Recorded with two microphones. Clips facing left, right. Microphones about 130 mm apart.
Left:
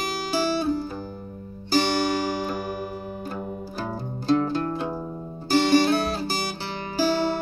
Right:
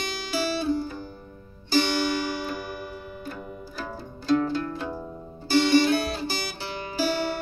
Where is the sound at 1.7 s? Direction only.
45° left (ahead or behind).